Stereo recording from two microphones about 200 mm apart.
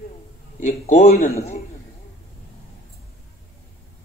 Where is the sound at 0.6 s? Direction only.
35° left (ahead or behind).